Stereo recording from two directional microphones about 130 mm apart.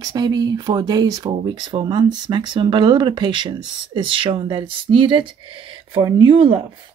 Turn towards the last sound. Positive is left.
turn(degrees=-40)  # may be behind; listen again after turning